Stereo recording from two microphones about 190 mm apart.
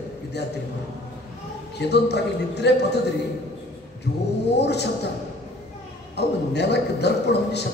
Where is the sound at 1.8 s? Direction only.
60° left (ahead or behind).